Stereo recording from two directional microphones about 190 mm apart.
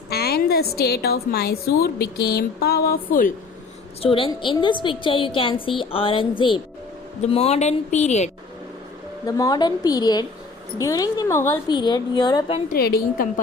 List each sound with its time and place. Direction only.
0.1 s a woman's voice: 55° left (ahead or behind)
4.0 s a woman's voice: 30° left (ahead or behind)
9.2 s a woman's voice: 20° left (ahead or behind)
12.6 s a woman's voice: 55° left (ahead or behind)